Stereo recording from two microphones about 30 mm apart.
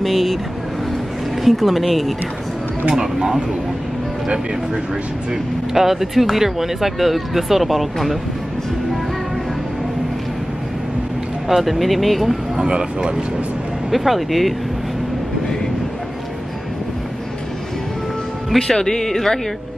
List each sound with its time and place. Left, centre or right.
0.0 s speech: centre
1.4 s speech: centre
2.9 s speech: centre
5.3 s speech: centre
11.4 s speech: centre
12.6 s speech: right
13.8 s speech: centre
18.8 s speech: centre